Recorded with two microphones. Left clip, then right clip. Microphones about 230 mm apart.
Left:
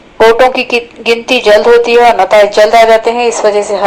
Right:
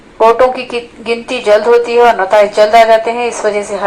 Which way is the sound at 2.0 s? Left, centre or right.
Left.